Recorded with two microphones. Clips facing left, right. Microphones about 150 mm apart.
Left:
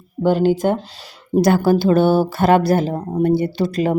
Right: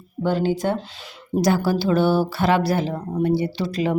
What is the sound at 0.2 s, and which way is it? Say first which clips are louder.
Speech: left 6 dB; 45° left (ahead or behind).